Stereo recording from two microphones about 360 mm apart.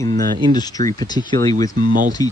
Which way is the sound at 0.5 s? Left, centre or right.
Centre.